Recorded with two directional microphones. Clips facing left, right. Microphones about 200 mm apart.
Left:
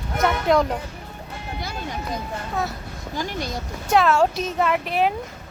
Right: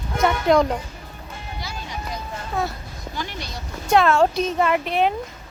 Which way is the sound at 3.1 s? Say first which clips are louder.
Left 5 dB; 45° left (ahead or behind).